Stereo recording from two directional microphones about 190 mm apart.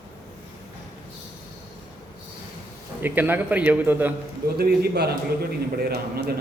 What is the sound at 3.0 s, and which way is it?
A man's voice, 10° right (ahead or behind).